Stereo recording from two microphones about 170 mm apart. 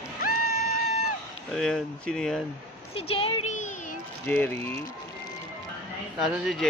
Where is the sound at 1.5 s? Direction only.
5° left (ahead or behind).